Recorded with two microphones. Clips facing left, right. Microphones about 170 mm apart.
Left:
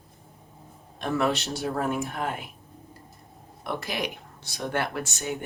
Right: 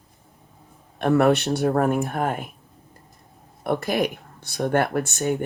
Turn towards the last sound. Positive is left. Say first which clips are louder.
# right 8 dB
turn(degrees=-55)  # may be behind; listen again after turning